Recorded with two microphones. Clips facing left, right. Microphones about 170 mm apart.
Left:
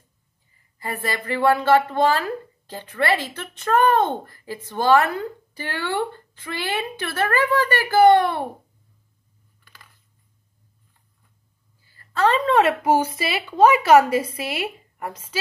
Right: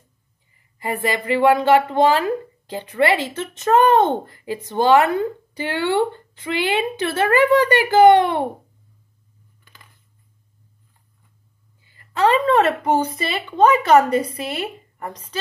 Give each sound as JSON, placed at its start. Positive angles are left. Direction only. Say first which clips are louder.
{"t": 0.7, "sound": "speech", "louder": "right 5 dB", "side_deg": -15}
{"t": 11.8, "sound": "a sound", "louder": "right 2 dB", "side_deg": -20}
{"t": 12.4, "sound": "a woman's voice", "louder": "right 1 dB", "side_deg": 0}